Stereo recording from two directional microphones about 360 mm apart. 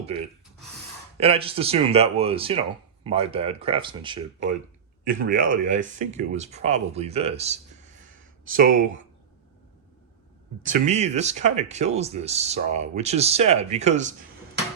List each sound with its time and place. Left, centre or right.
0.1 s speech: centre
5.0 s speech: right
8.1 s a sound: right
10.6 s speech: centre